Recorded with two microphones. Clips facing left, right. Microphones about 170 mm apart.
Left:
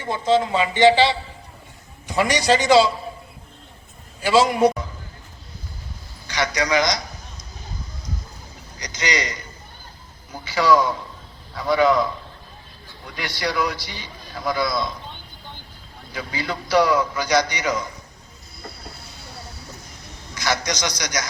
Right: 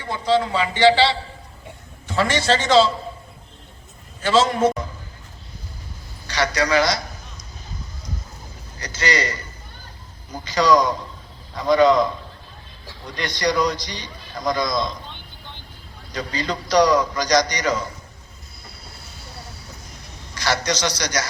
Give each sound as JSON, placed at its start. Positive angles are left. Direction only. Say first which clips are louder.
{"t": 0.0, "sound": "a man's voice", "louder": "left 1 dB", "side_deg": 20}
{"t": 4.2, "sound": "a man's voice", "louder": "left 1 dB", "side_deg": 10}
{"t": 6.2, "sound": "a man's voice", "louder": "right 2 dB", "side_deg": 10}
{"t": 8.8, "sound": "a man's voice", "louder": "right 2 dB", "side_deg": 15}
{"t": 10.4, "sound": "a man's voice", "louder": "right 2 dB", "side_deg": 10}
{"t": 10.7, "sound": "a man's voice", "louder": "even", "side_deg": -15}
{"t": 11.5, "sound": "a man's voice", "louder": "right 3 dB", "side_deg": 5}
{"t": 13.1, "sound": "a man's voice", "louder": "right 3 dB", "side_deg": 5}
{"t": 16.1, "sound": "a man's voice", "louder": "right 2 dB", "side_deg": 10}
{"t": 20.3, "sound": "a man's voice", "louder": "right 2 dB", "side_deg": 10}